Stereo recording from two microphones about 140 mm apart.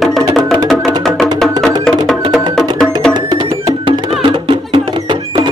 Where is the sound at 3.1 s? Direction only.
30° right (ahead or behind).